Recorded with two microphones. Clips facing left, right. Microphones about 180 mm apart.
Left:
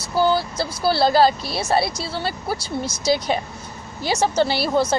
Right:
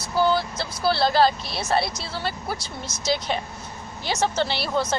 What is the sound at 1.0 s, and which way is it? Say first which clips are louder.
Speech: left 4 dB; 35° left (ahead or behind).